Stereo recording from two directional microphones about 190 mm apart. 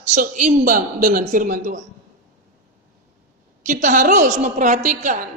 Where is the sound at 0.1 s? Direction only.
45° right (ahead or behind).